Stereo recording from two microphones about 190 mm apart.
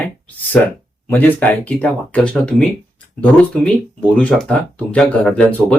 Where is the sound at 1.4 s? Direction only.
5° left (ahead or behind).